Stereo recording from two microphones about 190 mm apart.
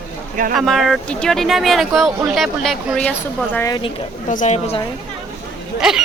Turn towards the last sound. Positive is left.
turn(degrees=-5)  # may be behind; listen again after turning